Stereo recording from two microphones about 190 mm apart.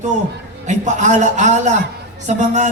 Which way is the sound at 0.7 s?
40° right (ahead or behind).